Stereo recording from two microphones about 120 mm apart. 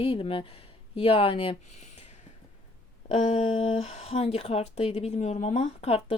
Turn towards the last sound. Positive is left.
turn(degrees=55)  # may be behind; listen again after turning